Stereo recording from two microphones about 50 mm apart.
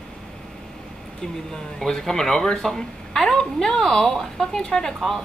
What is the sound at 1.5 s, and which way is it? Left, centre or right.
Speech, centre.